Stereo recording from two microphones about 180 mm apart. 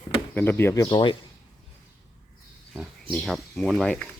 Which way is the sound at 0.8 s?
30° left (ahead or behind).